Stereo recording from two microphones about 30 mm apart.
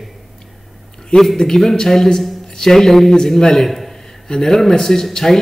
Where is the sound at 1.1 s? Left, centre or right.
Centre.